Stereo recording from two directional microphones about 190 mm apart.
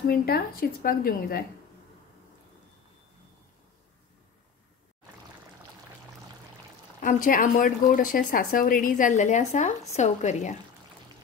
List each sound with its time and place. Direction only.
0.0 s speech: 55° left (ahead or behind)
7.0 s a woman's voice: 45° left (ahead or behind)